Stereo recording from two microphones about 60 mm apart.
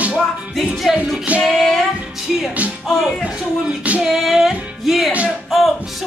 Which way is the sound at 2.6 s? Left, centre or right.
Right.